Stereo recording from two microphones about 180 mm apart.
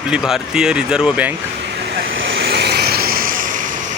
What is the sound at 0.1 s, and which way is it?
Speech, 5° right (ahead or behind).